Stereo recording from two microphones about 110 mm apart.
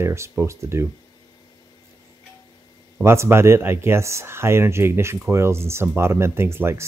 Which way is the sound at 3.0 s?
25° right (ahead or behind).